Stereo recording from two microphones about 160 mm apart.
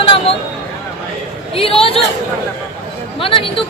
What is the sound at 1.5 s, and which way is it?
Speech, 35° left (ahead or behind).